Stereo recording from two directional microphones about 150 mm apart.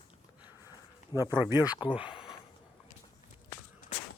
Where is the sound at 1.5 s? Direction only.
25° left (ahead or behind).